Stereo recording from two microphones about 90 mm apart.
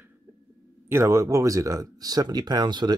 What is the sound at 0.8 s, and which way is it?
Speech, 30° right (ahead or behind).